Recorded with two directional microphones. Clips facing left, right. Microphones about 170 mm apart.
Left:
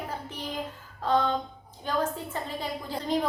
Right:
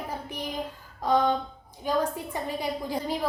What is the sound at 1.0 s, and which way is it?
A woman's voice, 15° right (ahead or behind).